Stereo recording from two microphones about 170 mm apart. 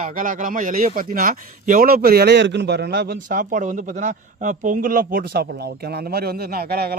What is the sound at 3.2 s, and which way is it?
Speech, 50° right (ahead or behind).